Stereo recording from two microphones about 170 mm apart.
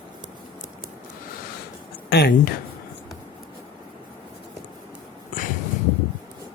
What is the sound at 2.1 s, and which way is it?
Speech, 75° left (ahead or behind).